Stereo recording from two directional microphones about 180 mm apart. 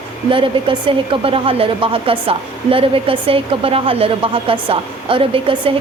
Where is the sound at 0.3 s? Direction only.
30° right (ahead or behind).